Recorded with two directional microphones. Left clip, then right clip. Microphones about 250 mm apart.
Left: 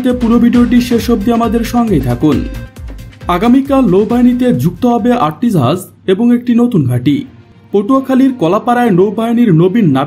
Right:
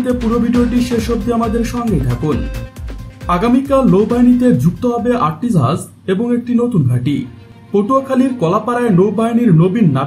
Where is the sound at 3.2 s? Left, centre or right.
Left.